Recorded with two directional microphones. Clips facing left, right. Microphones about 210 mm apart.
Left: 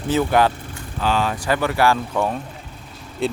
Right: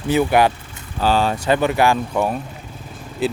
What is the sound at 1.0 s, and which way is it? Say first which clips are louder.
Speech: right 3 dB; 30° right (ahead or behind).